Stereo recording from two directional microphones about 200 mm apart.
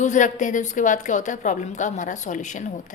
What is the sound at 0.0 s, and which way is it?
A woman's voice, 35° left (ahead or behind).